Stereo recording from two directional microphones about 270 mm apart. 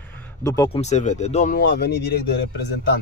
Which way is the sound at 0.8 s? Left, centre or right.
Left.